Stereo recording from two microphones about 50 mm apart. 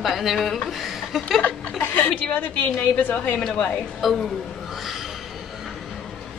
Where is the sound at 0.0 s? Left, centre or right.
Centre.